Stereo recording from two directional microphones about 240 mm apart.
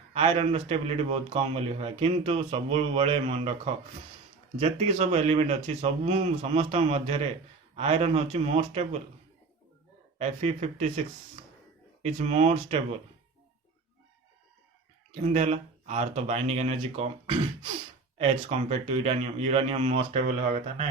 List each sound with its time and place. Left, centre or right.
0.1 s a man's voice: right
4.6 s a man's voice: right
10.2 s a man's voice: right
12.0 s a man's voice: right
15.1 s a man's voice: right